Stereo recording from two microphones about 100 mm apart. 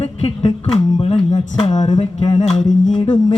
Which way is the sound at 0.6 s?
65° left (ahead or behind).